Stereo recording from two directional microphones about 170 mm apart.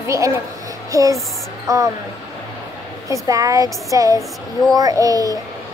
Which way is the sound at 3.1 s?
20° right (ahead or behind).